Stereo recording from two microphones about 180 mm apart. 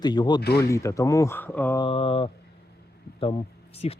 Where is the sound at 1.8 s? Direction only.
30° left (ahead or behind).